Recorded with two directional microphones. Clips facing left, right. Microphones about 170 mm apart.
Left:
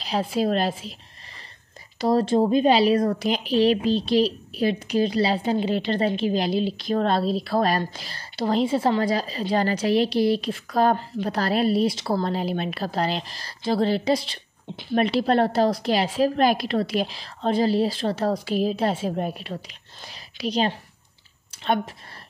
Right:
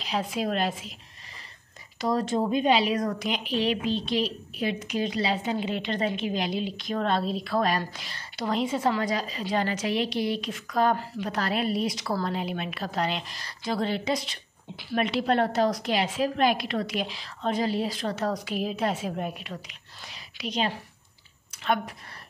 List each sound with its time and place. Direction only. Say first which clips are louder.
0.0 s a woman's voice: left 5 dB; 35° left (ahead or behind)
2.0 s a woman's voice: left 6 dB; 30° left (ahead or behind)